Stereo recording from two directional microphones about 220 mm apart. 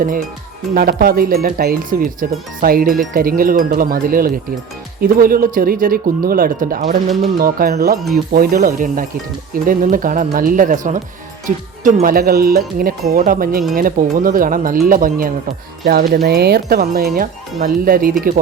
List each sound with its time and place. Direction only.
0.7 s speech: 45° right (ahead or behind)